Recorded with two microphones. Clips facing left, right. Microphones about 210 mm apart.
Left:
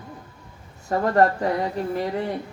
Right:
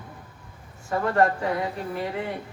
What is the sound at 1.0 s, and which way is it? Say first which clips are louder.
A woman's voice: left 3 dB; 40° left (ahead or behind).